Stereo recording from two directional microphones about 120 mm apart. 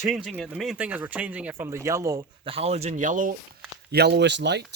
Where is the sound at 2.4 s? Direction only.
50° right (ahead or behind); by 3.3 s 90° right.